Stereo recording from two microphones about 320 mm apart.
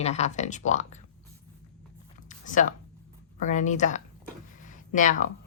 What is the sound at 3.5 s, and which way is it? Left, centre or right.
A woman's voice, left.